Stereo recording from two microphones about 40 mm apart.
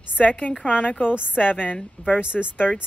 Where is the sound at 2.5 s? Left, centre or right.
Left.